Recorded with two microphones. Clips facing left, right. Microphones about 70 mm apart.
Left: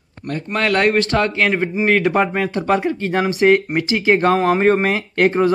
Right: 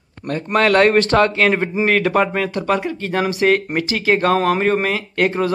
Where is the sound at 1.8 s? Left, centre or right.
Centre.